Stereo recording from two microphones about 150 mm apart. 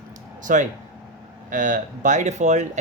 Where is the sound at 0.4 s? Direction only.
60° right (ahead or behind).